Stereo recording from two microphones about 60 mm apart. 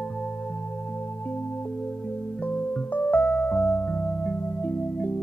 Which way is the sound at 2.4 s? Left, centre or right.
Left.